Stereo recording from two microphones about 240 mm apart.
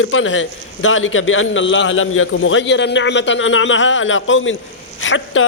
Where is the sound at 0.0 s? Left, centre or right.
Left.